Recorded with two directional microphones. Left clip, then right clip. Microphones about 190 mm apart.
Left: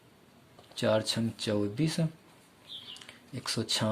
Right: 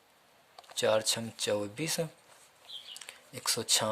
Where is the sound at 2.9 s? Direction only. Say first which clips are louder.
Even; 45° right (ahead or behind).